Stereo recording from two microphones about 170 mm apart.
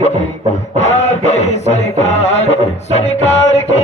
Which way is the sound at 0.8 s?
40° left (ahead or behind).